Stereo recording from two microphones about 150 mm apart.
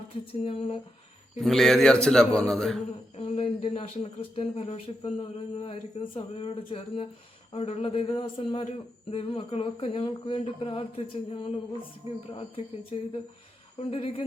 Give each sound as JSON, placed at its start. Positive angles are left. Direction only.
{"t": 0.4, "sound": "speech", "side_deg": 40}
{"t": 1.4, "sound": "a man's voice", "side_deg": 0}
{"t": 3.2, "sound": "speech", "side_deg": 40}